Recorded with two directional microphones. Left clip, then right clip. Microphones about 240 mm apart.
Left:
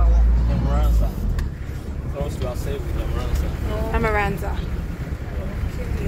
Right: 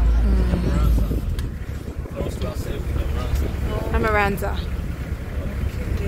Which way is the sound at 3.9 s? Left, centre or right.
Centre.